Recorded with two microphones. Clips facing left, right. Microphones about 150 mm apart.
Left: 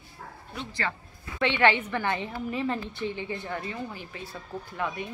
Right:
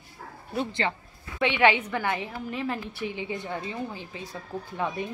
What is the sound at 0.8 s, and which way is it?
A woman's voice, 20° right (ahead or behind).